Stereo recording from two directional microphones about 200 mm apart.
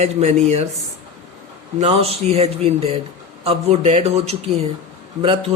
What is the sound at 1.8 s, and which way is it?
Speech, 30° right (ahead or behind).